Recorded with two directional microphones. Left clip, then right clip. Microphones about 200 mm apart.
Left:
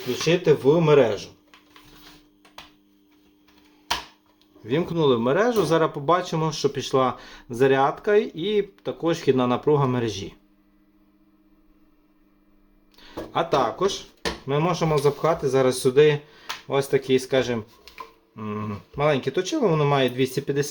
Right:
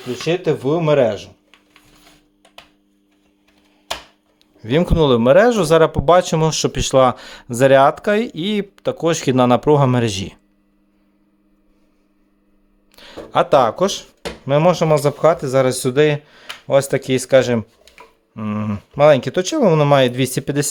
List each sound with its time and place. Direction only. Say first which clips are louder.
0.3 s speech: even; 50° right (ahead or behind)
4.6 s speech: right 6 dB; 60° right (ahead or behind)
13.0 s speech: right 8 dB; 65° right (ahead or behind)